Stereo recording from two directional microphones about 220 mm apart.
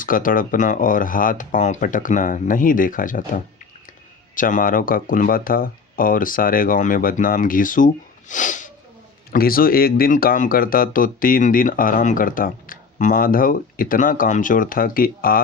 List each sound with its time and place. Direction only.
0.0 s speech: 40° left (ahead or behind)
8.3 s sneeze: 35° left (ahead or behind)
9.3 s speech: 40° left (ahead or behind)